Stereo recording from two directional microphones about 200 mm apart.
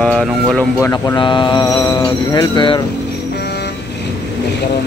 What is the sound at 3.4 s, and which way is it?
Vehicle, 55° left (ahead or behind).